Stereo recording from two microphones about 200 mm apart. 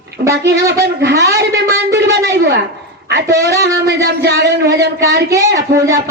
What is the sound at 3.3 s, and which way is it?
Speech, 55° right (ahead or behind).